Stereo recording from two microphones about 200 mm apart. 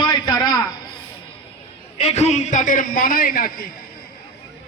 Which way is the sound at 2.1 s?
35° left (ahead or behind).